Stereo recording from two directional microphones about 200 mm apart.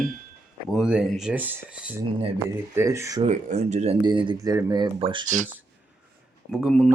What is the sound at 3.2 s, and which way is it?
Speech, 35° right (ahead or behind).